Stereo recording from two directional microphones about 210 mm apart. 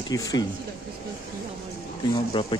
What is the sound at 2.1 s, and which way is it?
Speech, 25° left (ahead or behind).